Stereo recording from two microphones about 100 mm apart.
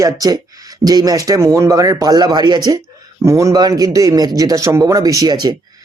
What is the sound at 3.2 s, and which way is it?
Speech, 30° right (ahead or behind).